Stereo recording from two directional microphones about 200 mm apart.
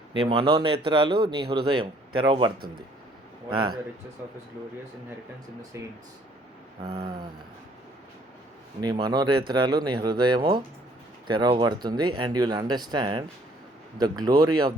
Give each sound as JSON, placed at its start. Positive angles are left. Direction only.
{"t": 0.1, "sound": "speech", "side_deg": -25}
{"t": 3.5, "sound": "speech", "side_deg": -25}
{"t": 6.8, "sound": "speech", "side_deg": -30}
{"t": 8.8, "sound": "speech", "side_deg": -20}